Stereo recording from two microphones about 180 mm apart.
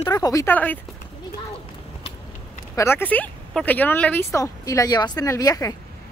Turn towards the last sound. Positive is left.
turn(degrees=20)  # may be behind; listen again after turning